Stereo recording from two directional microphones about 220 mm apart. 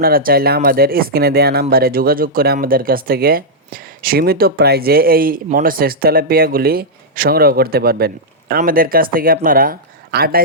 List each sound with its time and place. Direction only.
0.0 s speech: 40° right (ahead or behind)